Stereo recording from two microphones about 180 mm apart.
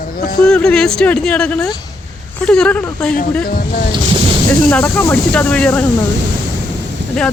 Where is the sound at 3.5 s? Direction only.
55° left (ahead or behind).